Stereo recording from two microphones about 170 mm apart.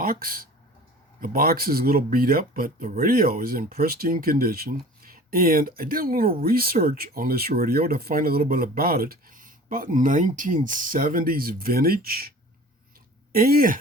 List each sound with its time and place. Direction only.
0.0 s speech: 60° right (ahead or behind)
13.3 s speech: 60° right (ahead or behind)